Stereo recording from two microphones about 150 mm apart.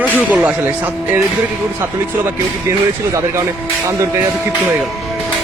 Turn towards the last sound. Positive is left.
turn(degrees=-20)  # may be behind; listen again after turning